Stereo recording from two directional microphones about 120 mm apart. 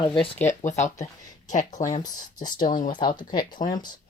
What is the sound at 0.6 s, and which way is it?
Speech, 90° left.